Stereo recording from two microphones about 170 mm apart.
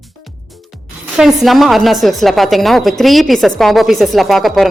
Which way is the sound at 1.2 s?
Centre (ahead or behind).